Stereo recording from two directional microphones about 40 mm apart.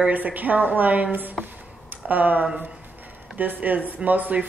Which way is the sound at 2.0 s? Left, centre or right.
Right.